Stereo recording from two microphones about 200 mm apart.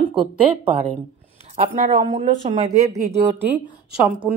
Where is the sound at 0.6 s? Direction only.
30° right (ahead or behind).